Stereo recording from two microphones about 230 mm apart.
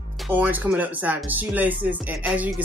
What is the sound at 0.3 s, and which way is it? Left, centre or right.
Speech, centre.